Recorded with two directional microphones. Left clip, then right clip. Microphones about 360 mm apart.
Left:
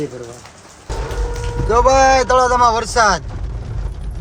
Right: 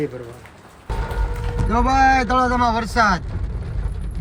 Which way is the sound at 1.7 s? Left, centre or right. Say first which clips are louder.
Left 5 dB; centre.